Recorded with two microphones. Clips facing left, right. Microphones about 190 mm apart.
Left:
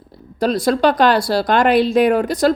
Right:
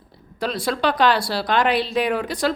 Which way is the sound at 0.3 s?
40° left (ahead or behind).